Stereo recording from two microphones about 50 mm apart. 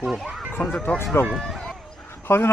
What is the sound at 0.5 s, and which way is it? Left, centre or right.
Speech, left.